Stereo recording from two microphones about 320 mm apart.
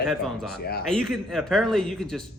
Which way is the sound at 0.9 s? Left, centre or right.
Centre.